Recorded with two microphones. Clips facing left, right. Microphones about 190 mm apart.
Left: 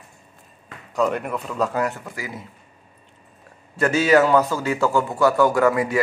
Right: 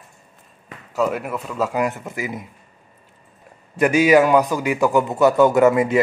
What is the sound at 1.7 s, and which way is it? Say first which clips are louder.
Speech: right 2 dB; 20° right (ahead or behind).